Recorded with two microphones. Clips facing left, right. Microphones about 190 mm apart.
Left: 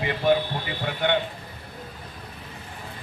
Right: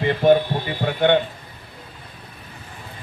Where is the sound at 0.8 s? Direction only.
50° right (ahead or behind).